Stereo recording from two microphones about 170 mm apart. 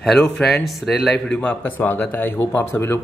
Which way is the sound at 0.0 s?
Centre (ahead or behind).